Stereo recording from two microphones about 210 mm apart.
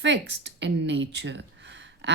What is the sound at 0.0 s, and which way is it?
A woman's voice, 60° right (ahead or behind).